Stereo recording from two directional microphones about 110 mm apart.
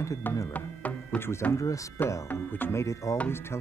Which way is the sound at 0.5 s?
15° left (ahead or behind).